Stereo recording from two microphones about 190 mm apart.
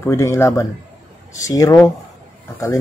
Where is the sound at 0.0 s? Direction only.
15° left (ahead or behind).